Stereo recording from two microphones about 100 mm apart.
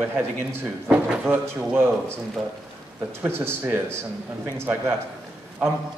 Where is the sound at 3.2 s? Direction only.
25° right (ahead or behind).